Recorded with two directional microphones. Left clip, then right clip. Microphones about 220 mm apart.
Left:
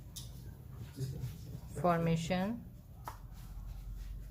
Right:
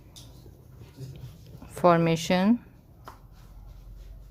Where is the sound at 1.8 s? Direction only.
50° right (ahead or behind).